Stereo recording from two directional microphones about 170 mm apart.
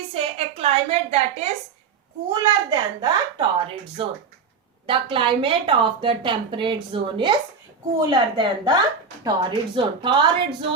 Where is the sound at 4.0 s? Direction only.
30° right (ahead or behind).